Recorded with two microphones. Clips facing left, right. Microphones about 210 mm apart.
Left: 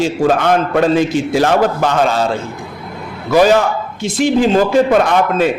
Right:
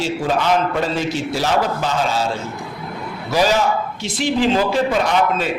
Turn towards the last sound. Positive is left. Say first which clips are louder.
# left 5 dB
turn(degrees=50)  # may be behind; listen again after turning